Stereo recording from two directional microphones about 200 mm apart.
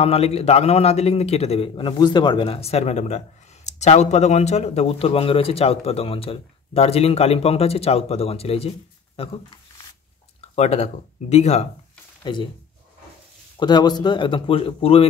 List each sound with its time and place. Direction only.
0.0 s a man's voice: 30° left (ahead or behind)
12.2 s speech: 25° left (ahead or behind)
13.6 s speech: 20° left (ahead or behind)